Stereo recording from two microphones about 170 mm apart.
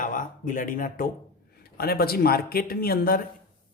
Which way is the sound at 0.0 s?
50° left (ahead or behind).